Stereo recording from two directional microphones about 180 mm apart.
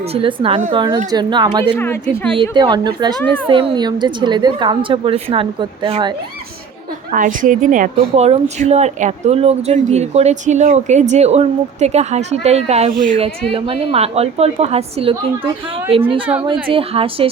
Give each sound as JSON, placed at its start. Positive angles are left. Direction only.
{"t": 0.1, "sound": "speech", "side_deg": -30}
{"t": 1.7, "sound": "speech", "side_deg": 10}
{"t": 2.3, "sound": "speech", "side_deg": -25}
{"t": 7.1, "sound": "a woman's voice", "side_deg": -45}